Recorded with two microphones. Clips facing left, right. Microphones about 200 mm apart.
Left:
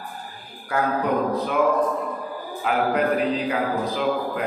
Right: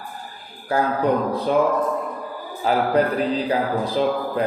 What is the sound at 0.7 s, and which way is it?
Speech, 30° right (ahead or behind).